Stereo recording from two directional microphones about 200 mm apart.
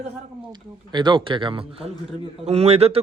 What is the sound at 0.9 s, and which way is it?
Speech, 25° right (ahead or behind).